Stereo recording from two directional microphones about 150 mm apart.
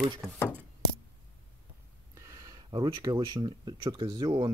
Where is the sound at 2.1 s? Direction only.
20° right (ahead or behind).